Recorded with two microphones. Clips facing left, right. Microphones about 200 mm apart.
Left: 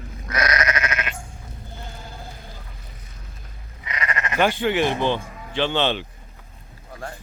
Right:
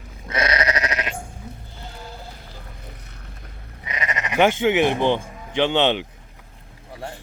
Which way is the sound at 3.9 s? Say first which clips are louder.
Right 1 dB; 20° right (ahead or behind).